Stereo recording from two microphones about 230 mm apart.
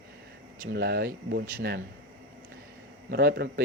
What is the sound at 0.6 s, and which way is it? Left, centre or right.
Speech, right.